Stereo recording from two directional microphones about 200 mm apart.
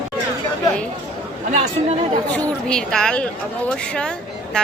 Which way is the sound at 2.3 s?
5° left (ahead or behind).